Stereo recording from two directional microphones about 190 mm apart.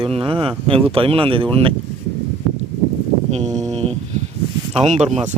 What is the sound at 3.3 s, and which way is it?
Speech, 35° right (ahead or behind).